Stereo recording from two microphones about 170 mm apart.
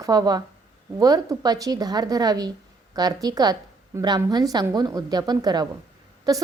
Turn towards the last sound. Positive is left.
turn(degrees=-20)  # may be behind; listen again after turning